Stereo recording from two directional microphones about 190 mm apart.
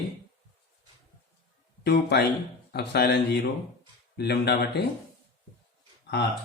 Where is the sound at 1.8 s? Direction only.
60° left (ahead or behind).